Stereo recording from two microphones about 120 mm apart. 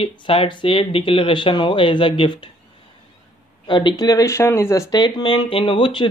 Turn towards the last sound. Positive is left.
turn(degrees=40)  # may be behind; listen again after turning